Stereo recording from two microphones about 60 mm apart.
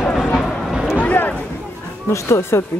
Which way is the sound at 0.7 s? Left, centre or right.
Centre.